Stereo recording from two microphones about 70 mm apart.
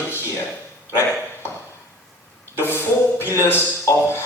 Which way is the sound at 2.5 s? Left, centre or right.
Left.